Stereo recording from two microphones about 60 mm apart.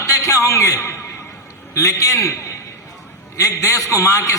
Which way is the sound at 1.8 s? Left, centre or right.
Left.